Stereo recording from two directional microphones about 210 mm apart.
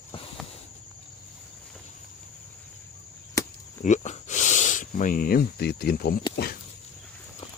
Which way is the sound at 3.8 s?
35° left (ahead or behind).